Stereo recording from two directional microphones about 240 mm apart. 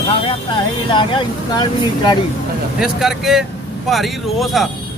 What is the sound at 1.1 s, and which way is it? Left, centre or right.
Speech, centre.